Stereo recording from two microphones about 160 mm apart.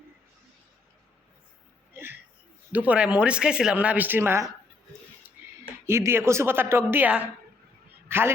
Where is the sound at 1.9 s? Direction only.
15° right (ahead or behind).